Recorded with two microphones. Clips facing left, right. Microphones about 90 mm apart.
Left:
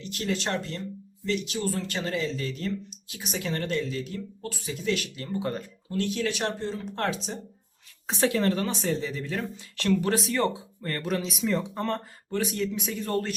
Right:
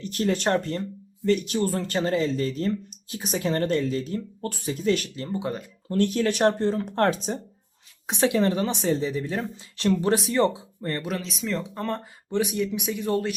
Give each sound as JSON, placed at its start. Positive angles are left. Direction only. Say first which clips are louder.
{"t": 0.0, "sound": "speech", "louder": "right 6 dB", "side_deg": -45}
{"t": 5.2, "sound": "speech", "louder": "right 2 dB", "side_deg": -25}
{"t": 5.9, "sound": "speech", "louder": "right 5 dB", "side_deg": -45}
{"t": 8.0, "sound": "speech", "louder": "right 2 dB", "side_deg": -20}
{"t": 11.1, "sound": "speech", "louder": "left 2 dB", "side_deg": 5}
{"t": 12.3, "sound": "speech", "louder": "right 3 dB", "side_deg": -15}